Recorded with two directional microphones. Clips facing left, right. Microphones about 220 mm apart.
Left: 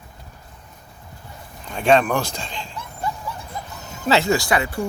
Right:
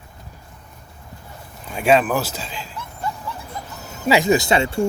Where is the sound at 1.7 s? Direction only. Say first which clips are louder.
Even; 5° right (ahead or behind).